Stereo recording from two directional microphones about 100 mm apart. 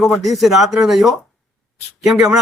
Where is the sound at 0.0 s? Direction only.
Centre (ahead or behind).